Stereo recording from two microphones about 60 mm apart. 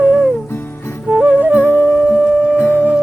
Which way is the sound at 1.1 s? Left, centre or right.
Right.